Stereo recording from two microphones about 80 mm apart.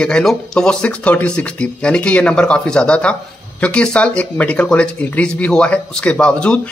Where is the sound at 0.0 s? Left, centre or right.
Centre.